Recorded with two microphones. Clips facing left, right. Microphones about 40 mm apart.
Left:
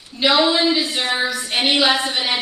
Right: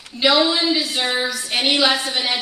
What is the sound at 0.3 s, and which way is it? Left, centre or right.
Speech, left.